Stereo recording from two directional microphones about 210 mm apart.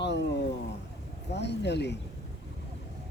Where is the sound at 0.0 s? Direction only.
55° left (ahead or behind).